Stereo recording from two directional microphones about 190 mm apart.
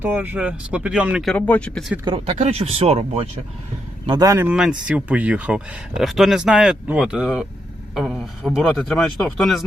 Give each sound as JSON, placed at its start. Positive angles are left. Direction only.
{"t": 0.0, "sound": "speech", "side_deg": -10}
{"t": 2.0, "sound": "speech", "side_deg": -30}
{"t": 4.0, "sound": "speech", "side_deg": -20}